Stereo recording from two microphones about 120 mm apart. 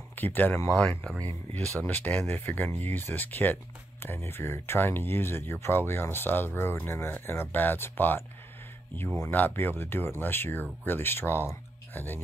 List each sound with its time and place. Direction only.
0.1 s speech: 15° left (ahead or behind)
9.3 s speech: 15° left (ahead or behind)